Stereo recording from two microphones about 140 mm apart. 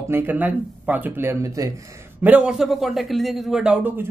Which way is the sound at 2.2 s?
10° right (ahead or behind).